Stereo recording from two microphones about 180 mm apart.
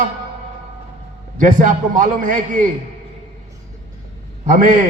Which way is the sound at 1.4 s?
45° right (ahead or behind).